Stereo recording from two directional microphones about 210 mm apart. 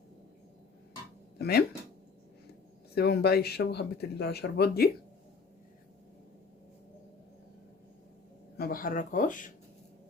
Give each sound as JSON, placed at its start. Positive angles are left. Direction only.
{"t": 1.4, "sound": "speech", "side_deg": 50}
{"t": 2.9, "sound": "speech", "side_deg": 50}
{"t": 8.5, "sound": "speech", "side_deg": 45}